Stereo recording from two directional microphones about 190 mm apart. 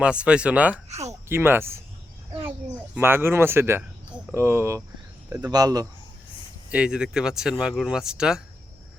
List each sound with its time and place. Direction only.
0.0 s speech: 5° right (ahead or behind)
0.9 s speech: 35° right (ahead or behind)
1.3 s speech: 10° right (ahead or behind)
2.9 s speech: 10° right (ahead or behind)
6.7 s speech: 5° right (ahead or behind)